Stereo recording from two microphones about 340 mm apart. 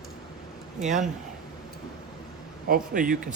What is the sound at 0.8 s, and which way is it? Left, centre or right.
Speech, right.